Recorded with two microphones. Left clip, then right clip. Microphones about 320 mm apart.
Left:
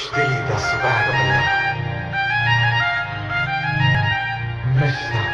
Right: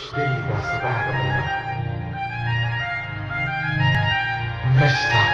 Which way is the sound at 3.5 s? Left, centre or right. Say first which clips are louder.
Left 1 dB; centre.